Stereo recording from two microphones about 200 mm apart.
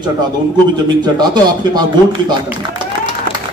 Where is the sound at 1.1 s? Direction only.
20° right (ahead or behind).